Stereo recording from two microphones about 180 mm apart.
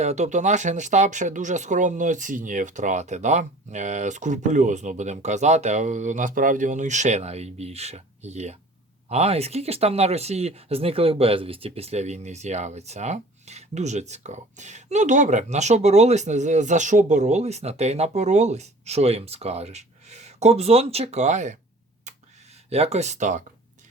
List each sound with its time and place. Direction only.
0.0 s speech: 40° right (ahead or behind)
22.7 s speech: 35° right (ahead or behind)